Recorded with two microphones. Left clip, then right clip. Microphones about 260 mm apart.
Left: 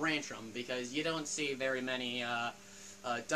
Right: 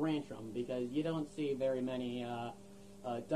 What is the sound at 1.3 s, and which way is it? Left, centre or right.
Speech, centre.